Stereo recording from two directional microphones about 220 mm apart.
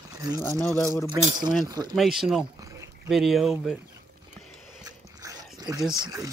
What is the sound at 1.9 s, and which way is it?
Speech, centre (ahead or behind).